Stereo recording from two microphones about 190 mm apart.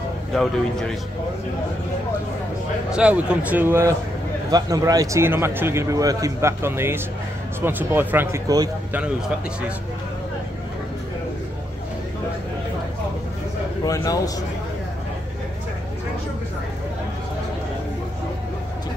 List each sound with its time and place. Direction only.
0.3 s speech: centre (ahead or behind)
2.9 s speech: 5° right (ahead or behind)
13.8 s a man's voice: 20° left (ahead or behind)